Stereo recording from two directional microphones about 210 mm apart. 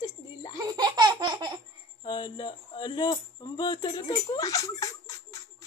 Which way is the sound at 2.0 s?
20° left (ahead or behind).